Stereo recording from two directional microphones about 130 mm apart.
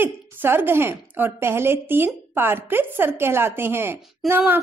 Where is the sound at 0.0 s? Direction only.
15° right (ahead or behind).